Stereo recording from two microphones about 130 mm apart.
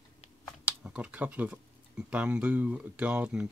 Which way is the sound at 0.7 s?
10° right (ahead or behind).